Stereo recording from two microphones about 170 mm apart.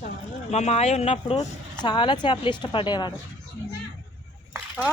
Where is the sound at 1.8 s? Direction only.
25° left (ahead or behind).